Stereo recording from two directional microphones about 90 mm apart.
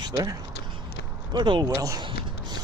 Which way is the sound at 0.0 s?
45° right (ahead or behind).